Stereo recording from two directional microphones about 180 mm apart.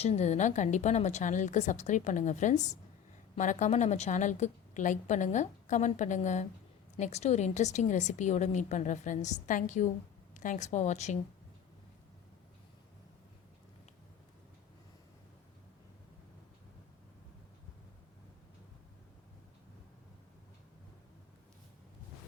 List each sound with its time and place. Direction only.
0.0 s a woman's voice: 35° left (ahead or behind)